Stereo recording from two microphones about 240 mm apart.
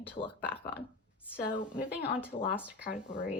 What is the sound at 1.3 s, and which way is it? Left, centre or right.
Speech, centre.